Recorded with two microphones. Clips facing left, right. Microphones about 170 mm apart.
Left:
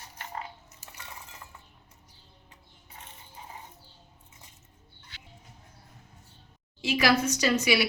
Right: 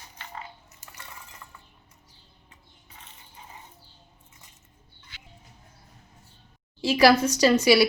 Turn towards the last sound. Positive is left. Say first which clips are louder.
# right 7 dB
turn(degrees=-35)  # may be behind; listen again after turning